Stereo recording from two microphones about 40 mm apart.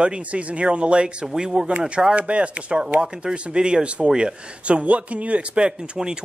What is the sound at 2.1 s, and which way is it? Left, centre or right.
A man's voice, right.